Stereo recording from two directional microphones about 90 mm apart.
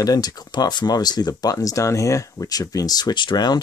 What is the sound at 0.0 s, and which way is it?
Speech, 40° left (ahead or behind).